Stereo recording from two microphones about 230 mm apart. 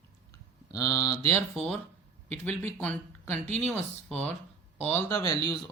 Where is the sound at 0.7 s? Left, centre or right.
Centre.